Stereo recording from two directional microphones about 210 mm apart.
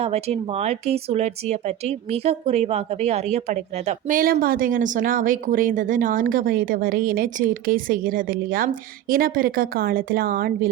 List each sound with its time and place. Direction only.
0.0 s speech: 30° right (ahead or behind)